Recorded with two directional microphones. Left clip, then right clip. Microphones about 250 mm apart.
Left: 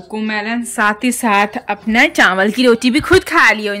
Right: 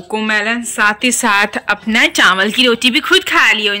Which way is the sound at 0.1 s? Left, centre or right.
Centre.